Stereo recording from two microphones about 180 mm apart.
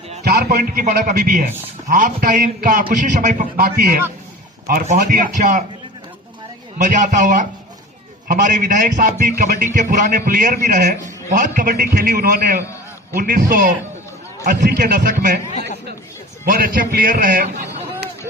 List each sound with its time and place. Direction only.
0.1 s a sound: 40° right (ahead or behind)
0.5 s a man's voice: 45° right (ahead or behind)
4.9 s a man's voice: 50° right (ahead or behind)
6.7 s a man's voice: 45° right (ahead or behind)
16.5 s a man's voice: 50° right (ahead or behind)